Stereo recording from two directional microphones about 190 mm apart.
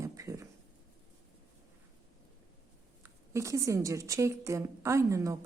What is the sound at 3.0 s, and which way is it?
A woman's voice, 15° right (ahead or behind).